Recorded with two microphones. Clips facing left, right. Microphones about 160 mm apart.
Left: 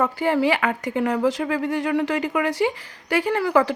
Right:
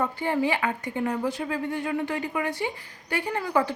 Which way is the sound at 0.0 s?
90° left.